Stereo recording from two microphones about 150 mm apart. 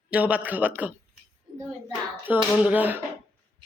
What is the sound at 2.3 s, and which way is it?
Speech, 10° right (ahead or behind).